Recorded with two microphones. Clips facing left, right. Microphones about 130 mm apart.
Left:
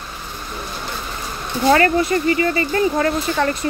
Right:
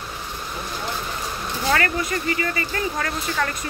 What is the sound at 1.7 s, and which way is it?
Speech, 30° left (ahead or behind).